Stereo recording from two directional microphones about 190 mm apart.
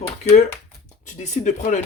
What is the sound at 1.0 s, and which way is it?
Speech, 40° left (ahead or behind).